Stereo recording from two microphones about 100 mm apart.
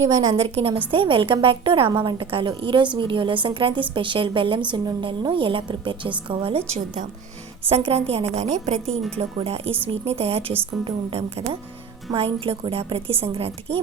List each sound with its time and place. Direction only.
0.1 s a woman's voice: 35° right (ahead or behind)
0.3 s a woman's voice: 80° right
0.9 s a woman's voice: 65° right (ahead or behind); by 10.4 s 85° right
12.1 s a woman's voice: 70° right (ahead or behind)